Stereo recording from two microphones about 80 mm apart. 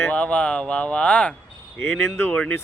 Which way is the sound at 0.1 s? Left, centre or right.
Centre.